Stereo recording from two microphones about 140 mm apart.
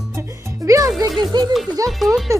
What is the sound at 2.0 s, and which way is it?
Music, centre (ahead or behind).